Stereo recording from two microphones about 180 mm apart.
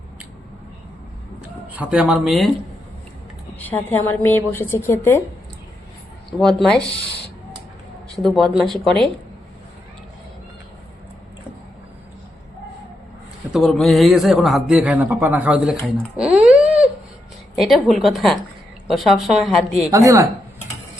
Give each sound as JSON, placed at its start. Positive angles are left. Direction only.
{"t": 1.4, "sound": "speech", "side_deg": -10}
{"t": 3.6, "sound": "a woman's voice", "side_deg": 10}
{"t": 6.4, "sound": "speech", "side_deg": 0}
{"t": 8.1, "sound": "speech", "side_deg": 0}
{"t": 13.5, "sound": "speech", "side_deg": 0}
{"t": 16.1, "sound": "a sound", "side_deg": -5}
{"t": 17.6, "sound": "speech", "side_deg": 0}
{"t": 19.9, "sound": "speech", "side_deg": -15}